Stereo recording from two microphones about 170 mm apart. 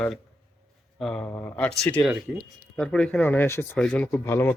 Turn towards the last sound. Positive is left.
turn(degrees=15)  # may be behind; listen again after turning